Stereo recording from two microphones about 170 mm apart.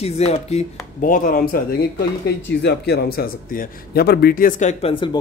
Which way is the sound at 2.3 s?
80° left.